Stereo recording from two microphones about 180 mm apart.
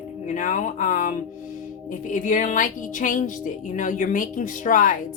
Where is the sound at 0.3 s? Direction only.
45° left (ahead or behind).